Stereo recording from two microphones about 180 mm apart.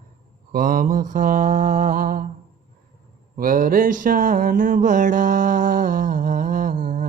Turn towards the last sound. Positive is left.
turn(degrees=-45)  # may be behind; listen again after turning